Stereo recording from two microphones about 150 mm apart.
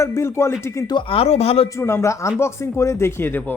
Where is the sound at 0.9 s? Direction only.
35° left (ahead or behind).